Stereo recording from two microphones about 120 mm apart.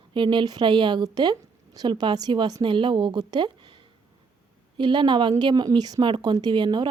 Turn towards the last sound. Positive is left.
turn(degrees=-40)  # may be behind; listen again after turning